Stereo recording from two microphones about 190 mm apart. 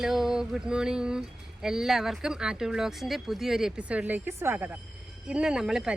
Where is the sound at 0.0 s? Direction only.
Centre (ahead or behind).